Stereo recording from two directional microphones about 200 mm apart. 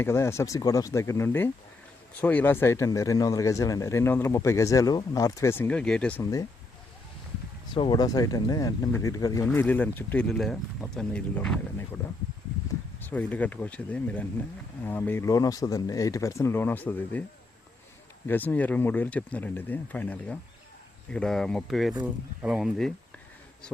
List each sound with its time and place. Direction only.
0.0 s speech: 15° left (ahead or behind)
7.7 s speech: 25° left (ahead or behind)
13.0 s speech: 10° left (ahead or behind)
18.3 s speech: 10° left (ahead or behind)